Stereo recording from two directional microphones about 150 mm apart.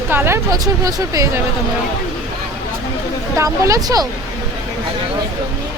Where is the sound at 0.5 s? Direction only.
25° right (ahead or behind).